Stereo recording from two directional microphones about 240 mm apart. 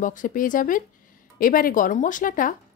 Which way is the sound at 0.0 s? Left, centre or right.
Left.